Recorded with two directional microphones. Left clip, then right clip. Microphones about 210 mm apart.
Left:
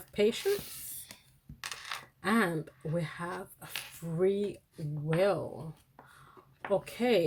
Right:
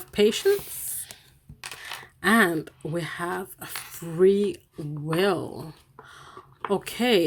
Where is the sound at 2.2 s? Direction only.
40° right (ahead or behind).